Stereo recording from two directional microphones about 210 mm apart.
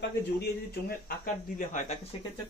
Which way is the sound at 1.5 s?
35° left (ahead or behind).